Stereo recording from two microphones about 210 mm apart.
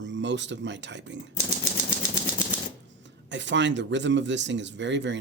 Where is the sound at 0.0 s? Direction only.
55° right (ahead or behind).